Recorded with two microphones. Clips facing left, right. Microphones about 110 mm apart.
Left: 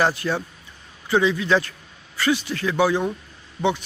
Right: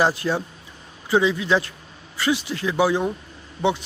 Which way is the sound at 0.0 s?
15° right (ahead or behind).